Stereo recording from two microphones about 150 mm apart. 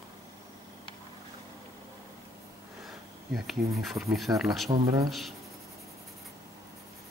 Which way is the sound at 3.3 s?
Centre (ahead or behind).